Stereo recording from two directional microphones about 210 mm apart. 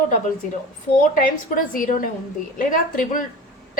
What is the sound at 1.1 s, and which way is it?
A woman's voice, 40° left (ahead or behind).